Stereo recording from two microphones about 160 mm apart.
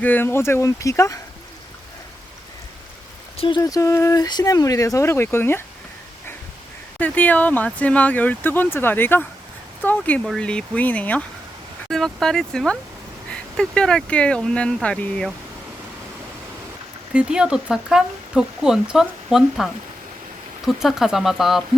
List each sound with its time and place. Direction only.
0.0 s speech: 10° left (ahead or behind)
3.3 s speech: 35° left (ahead or behind)
3.6 s speech: 20° left (ahead or behind)
7.0 s speech: 10° left (ahead or behind)
17.1 s speech: 5° right (ahead or behind)